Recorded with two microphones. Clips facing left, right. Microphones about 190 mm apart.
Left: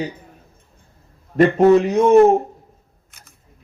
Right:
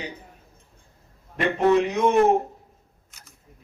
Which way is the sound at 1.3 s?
40° left (ahead or behind).